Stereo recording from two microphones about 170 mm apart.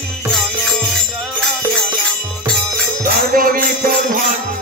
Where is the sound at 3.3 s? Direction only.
55° right (ahead or behind).